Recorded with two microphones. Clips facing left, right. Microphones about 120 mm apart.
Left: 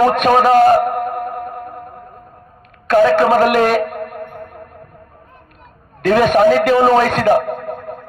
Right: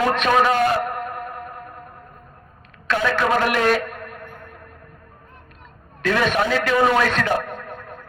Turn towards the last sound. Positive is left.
turn(degrees=50)  # may be behind; listen again after turning